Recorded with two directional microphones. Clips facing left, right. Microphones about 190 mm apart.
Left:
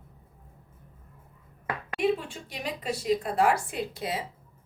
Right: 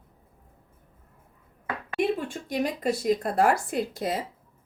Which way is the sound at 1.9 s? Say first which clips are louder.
Right 1 dB; 45° right (ahead or behind).